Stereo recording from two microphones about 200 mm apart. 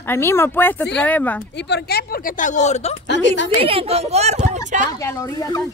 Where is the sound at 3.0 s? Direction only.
60° left (ahead or behind).